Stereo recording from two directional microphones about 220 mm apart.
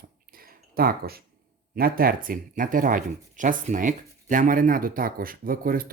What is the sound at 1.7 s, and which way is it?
Speech, 40° right (ahead or behind).